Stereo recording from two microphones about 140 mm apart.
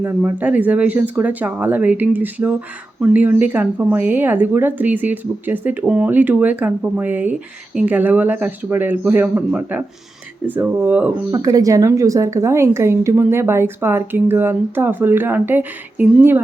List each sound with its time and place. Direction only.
0.0 s speech: 10° right (ahead or behind)
11.4 s speech: 25° right (ahead or behind)